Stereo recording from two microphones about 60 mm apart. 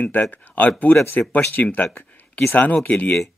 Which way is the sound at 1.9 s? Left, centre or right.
Left.